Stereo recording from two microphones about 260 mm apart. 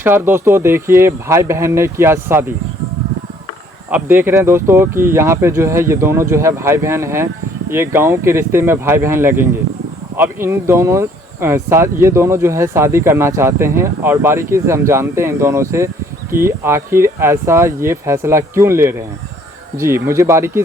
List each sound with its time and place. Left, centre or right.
0.0 s speech: centre
3.8 s speech: centre